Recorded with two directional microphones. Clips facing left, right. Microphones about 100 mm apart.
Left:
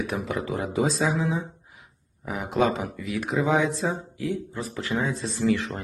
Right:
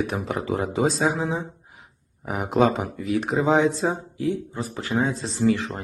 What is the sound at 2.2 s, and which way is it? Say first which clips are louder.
Speech: right 3 dB; 45° right (ahead or behind).